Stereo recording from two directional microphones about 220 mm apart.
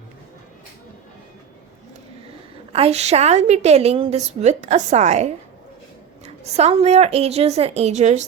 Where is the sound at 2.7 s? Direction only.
30° right (ahead or behind).